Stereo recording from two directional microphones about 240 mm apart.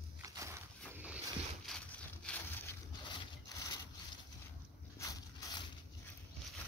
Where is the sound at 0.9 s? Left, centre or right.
Centre.